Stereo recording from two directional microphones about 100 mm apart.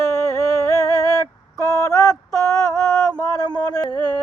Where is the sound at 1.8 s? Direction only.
35° left (ahead or behind).